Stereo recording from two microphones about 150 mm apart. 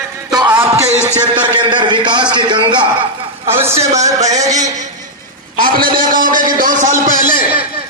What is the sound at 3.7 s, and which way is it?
A man's voice, 50° right (ahead or behind).